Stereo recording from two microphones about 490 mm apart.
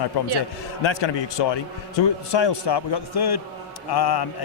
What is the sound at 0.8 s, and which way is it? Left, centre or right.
A man's voice, left.